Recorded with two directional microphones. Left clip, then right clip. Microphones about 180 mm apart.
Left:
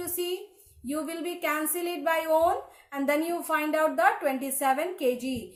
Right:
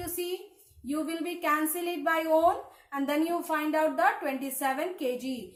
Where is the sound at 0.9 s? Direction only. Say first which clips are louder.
Even; 30° left (ahead or behind).